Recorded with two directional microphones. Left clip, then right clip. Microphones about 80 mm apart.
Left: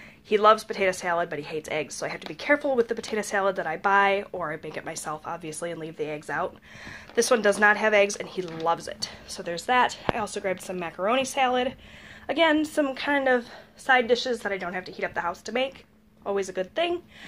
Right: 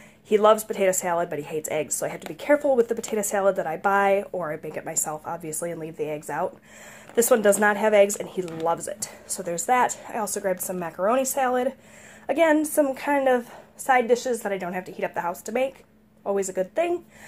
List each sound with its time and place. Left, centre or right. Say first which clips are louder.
0.3 s a woman's voice: right 1 dB; right
1.0 s speech: right 1 dB; right
1.9 s a woman's voice: right 3 dB; right
2.3 s speech: right 3 dB; right
3.1 s speech: right 3 dB; right
7.2 s a woman's voice: right 2 dB; right
10.5 s a woman's voice: right 3 dB; right
13.1 s speech: right 2 dB; right